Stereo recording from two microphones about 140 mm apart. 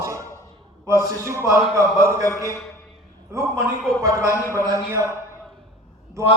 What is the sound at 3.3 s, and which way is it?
A man's voice, 20° right (ahead or behind).